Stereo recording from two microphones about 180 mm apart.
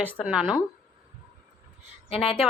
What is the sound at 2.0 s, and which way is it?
Speech, 35° left (ahead or behind).